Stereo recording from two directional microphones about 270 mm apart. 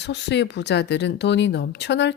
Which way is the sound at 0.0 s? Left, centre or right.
Left.